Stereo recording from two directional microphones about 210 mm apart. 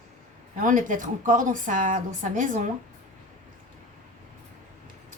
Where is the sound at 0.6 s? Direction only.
40° right (ahead or behind).